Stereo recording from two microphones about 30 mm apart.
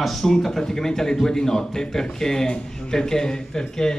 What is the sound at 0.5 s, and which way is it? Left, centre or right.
A man's voice, centre.